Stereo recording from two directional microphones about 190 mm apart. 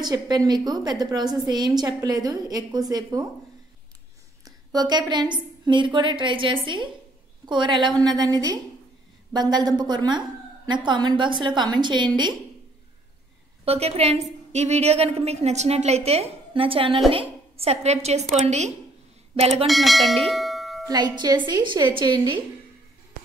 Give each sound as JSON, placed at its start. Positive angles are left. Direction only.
{"t": 0.0, "sound": "a woman's voice", "side_deg": -20}
{"t": 4.5, "sound": "a woman's voice", "side_deg": -20}
{"t": 13.7, "sound": "a woman's voice", "side_deg": -35}
{"t": 19.3, "sound": "speech", "side_deg": -35}
{"t": 19.6, "sound": "bell", "side_deg": 0}
{"t": 20.2, "sound": "cowbell", "side_deg": 0}
{"t": 20.8, "sound": "a woman's voice", "side_deg": -20}